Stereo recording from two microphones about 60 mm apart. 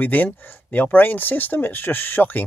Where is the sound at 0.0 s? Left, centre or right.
Left.